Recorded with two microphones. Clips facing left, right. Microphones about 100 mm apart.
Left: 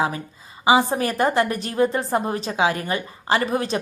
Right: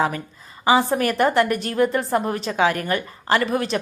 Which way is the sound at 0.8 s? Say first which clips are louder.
Right 2 dB; 30° left (ahead or behind).